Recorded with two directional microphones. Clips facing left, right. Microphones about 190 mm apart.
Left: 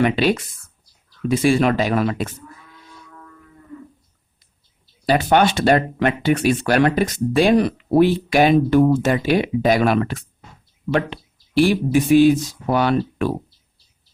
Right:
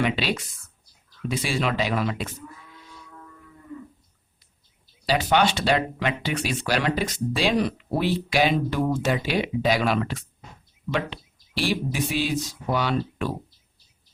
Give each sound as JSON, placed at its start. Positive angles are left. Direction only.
{"t": 0.0, "sound": "speech", "side_deg": 50}
{"t": 5.0, "sound": "speech", "side_deg": 50}